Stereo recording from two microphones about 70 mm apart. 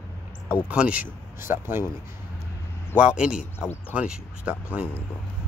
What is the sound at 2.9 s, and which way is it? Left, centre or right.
A man's voice, centre.